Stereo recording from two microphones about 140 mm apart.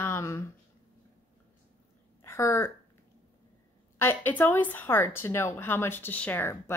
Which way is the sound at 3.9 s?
15° left (ahead or behind).